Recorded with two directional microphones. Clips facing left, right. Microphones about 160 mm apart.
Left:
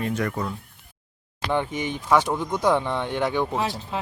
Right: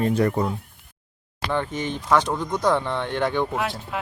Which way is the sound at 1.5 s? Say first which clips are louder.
Even; 15° left (ahead or behind).